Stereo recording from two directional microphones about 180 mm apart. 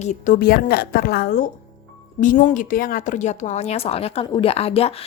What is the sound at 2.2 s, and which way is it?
A woman's voice, 45° left (ahead or behind).